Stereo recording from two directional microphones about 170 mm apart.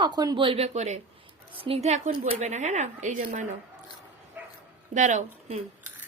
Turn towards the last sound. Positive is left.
turn(degrees=-45)  # may be behind; listen again after turning